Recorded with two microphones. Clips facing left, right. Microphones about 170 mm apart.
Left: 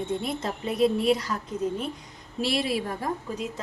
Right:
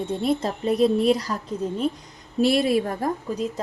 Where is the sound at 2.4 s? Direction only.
45° right (ahead or behind).